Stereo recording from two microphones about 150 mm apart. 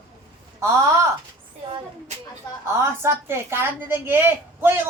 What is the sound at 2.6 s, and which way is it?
A woman's voice, 20° right (ahead or behind).